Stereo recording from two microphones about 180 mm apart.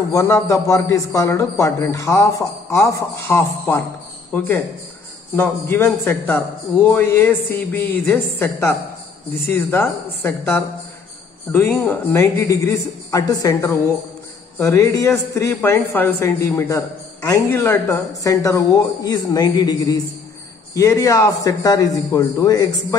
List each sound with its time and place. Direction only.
0.1 s a man's voice: 15° left (ahead or behind)